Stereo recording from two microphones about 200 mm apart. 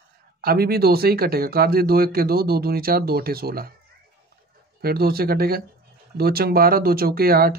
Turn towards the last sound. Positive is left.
turn(degrees=-50)  # may be behind; listen again after turning